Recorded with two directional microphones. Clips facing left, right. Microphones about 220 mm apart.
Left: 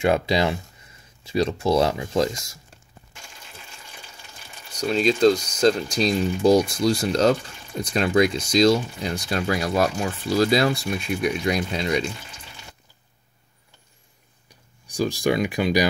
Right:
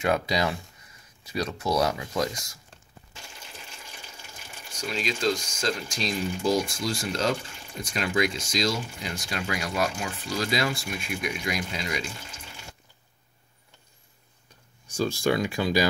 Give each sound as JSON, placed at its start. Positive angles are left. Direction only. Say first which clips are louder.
{"t": 0.0, "sound": "speech", "louder": "left 5 dB", "side_deg": 25}
{"t": 4.7, "sound": "speech", "louder": "left 10 dB", "side_deg": 35}
{"t": 15.0, "sound": "speech", "louder": "left 3 dB", "side_deg": 15}